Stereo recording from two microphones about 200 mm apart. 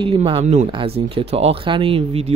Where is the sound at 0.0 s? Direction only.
25° right (ahead or behind).